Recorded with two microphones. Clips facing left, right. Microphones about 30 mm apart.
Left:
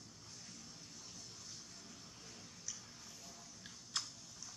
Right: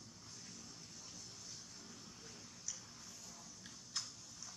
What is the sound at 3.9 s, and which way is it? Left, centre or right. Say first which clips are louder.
Typing: left 3 dB; left.